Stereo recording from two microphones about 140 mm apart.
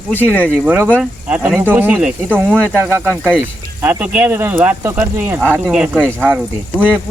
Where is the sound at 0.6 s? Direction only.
15° right (ahead or behind).